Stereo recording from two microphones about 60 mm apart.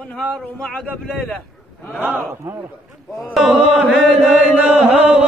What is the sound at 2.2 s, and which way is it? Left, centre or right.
Speech, right.